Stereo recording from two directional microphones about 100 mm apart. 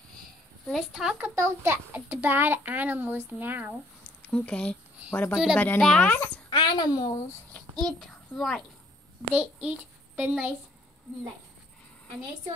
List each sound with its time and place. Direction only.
0.7 s a woman's voice: centre (ahead or behind)
1.2 s a child's voice: 25° right (ahead or behind)
4.3 s speech: 10° left (ahead or behind)
5.3 s speech: 5° right (ahead or behind)
5.8 s a child's voice: 5° left (ahead or behind)
6.5 s a child's voice: 45° left (ahead or behind)
7.5 s a sound: 10° left (ahead or behind)
9.3 s a child's voice: 10° right (ahead or behind)